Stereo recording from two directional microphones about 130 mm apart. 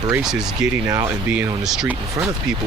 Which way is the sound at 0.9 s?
25° right (ahead or behind).